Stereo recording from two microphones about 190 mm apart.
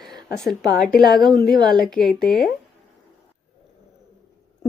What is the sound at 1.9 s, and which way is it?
Speech, centre (ahead or behind).